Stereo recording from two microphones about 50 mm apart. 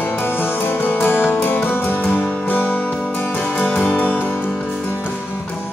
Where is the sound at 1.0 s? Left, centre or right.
Left.